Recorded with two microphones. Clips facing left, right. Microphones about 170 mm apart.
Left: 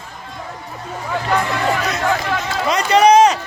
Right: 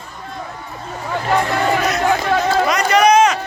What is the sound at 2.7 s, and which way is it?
Run, 30° left (ahead or behind).